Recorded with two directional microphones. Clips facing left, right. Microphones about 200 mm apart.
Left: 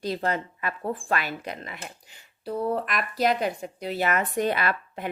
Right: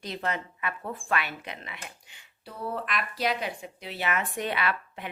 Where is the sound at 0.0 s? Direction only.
35° left (ahead or behind).